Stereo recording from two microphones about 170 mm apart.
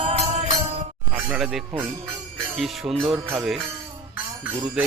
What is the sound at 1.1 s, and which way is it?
Speech, 5° right (ahead or behind).